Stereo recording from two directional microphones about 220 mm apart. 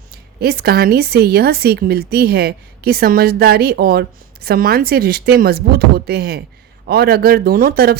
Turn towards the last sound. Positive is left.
turn(degrees=-45)  # may be behind; listen again after turning